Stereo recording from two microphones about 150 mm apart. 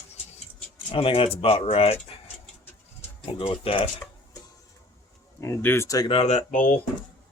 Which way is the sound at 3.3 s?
40° left (ahead or behind).